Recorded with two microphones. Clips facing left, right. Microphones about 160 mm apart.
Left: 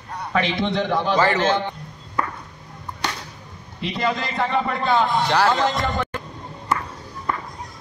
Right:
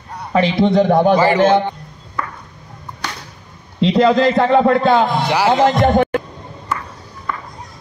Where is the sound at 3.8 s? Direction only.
80° right.